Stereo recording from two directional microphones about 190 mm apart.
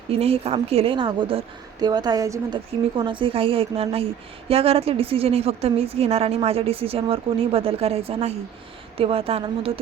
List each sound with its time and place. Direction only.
0.1 s a woman's voice: 30° right (ahead or behind)